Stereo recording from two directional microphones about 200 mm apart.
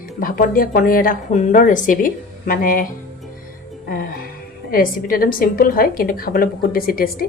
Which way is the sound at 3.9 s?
45° left (ahead or behind).